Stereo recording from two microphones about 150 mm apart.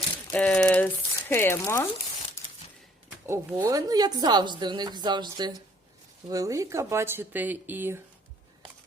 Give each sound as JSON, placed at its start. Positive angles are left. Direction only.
{"t": 0.3, "sound": "a sound", "side_deg": 10}
{"t": 1.3, "sound": "speech", "side_deg": 15}
{"t": 3.2, "sound": "a woman's voice", "side_deg": -20}